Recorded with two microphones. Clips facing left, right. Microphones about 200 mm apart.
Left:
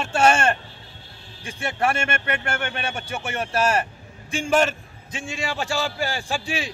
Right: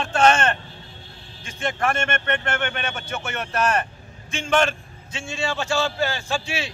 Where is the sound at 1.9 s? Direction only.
10° left (ahead or behind).